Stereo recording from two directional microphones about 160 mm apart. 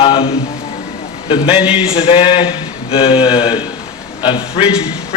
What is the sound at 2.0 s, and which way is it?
A man's voice, 35° left (ahead or behind).